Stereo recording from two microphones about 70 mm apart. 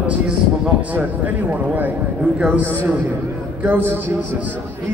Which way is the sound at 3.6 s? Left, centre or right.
Right.